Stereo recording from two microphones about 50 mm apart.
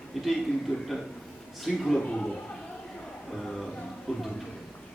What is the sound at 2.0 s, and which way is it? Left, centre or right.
Speech, centre.